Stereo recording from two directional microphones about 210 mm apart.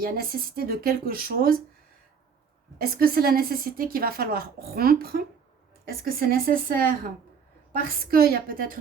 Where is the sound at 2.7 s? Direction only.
45° right (ahead or behind).